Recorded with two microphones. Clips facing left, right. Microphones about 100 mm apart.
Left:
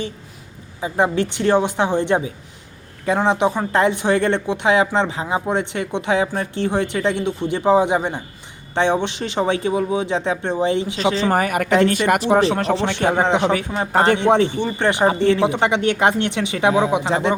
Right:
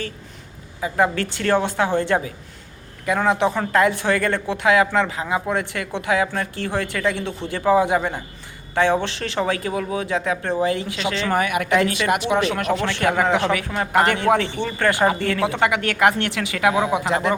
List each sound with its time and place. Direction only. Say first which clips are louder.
0.8 s speech: left 1 dB; 20° left (ahead or behind)
10.9 s speech: left 4 dB; 35° left (ahead or behind)